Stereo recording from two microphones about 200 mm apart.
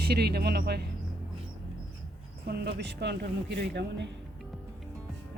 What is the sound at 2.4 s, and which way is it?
Speech, 55° right (ahead or behind).